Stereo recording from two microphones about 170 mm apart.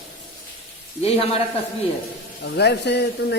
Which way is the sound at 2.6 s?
80° left.